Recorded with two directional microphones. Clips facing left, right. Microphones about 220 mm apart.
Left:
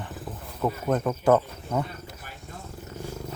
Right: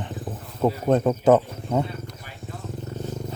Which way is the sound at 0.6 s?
30° right (ahead or behind).